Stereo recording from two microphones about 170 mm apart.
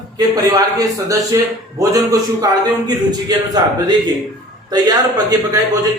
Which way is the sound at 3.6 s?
25° right (ahead or behind).